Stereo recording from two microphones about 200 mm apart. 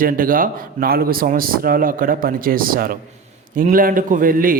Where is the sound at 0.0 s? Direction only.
45° right (ahead or behind).